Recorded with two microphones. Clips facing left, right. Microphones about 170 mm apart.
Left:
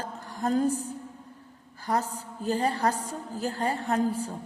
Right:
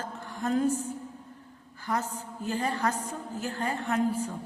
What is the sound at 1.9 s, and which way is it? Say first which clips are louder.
A woman's voice: left 3 dB; 35° left (ahead or behind).